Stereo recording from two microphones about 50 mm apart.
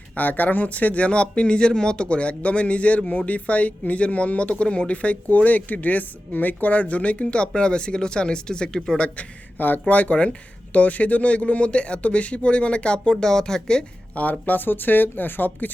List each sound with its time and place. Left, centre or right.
0.2 s speech: left; by 9.0 s centre
9.1 s speech: left; by 13.8 s centre
14.2 s speech: left